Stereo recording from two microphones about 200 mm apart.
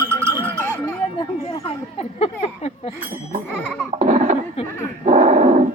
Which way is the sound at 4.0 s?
35° right (ahead or behind).